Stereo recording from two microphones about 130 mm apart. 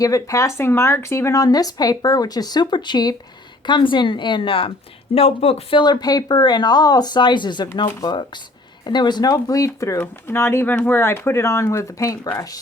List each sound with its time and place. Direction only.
0.0 s speech: 25° left (ahead or behind); by 5.8 s 50° left (ahead or behind)
5.8 s speech: 30° left (ahead or behind)